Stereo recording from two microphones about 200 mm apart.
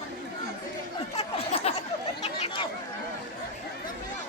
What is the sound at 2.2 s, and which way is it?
Chatter, 30° left (ahead or behind).